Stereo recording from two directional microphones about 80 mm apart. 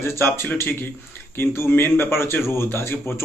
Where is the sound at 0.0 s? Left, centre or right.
Left.